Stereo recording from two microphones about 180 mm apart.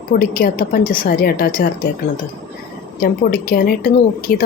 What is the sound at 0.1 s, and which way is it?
A woman's voice, 55° left (ahead or behind).